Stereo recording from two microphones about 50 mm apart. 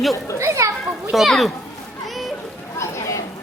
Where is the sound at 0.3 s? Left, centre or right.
Right.